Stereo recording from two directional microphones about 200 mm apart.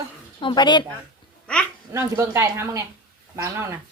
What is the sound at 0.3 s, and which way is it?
Speech, 25° left (ahead or behind).